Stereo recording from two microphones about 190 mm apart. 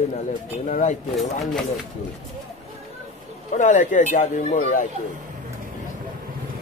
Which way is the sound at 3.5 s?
40° left (ahead or behind).